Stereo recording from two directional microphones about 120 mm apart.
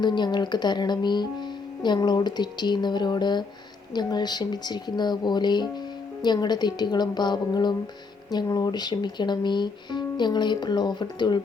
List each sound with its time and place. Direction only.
0.0 s speech: 40° left (ahead or behind)